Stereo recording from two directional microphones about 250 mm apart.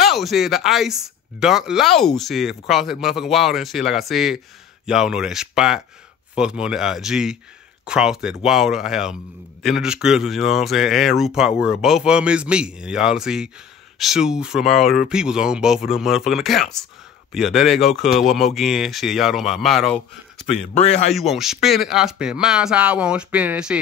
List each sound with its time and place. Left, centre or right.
0.0 s a man's voice: centre
20.7 s speech: left
21.1 s a man's voice: centre